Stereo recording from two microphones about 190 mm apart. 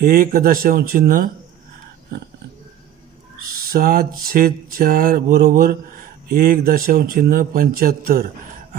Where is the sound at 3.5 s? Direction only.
50° right (ahead or behind).